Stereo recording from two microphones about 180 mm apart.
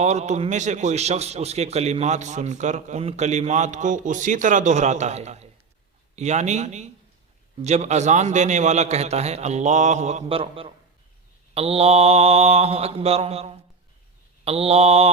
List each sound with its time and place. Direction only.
0.0 s speech: 40° right (ahead or behind)